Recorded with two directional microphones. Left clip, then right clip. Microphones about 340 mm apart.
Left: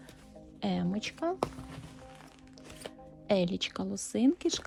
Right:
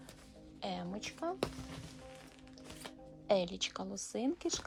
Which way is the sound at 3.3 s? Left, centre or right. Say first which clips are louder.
Left 3 dB; left.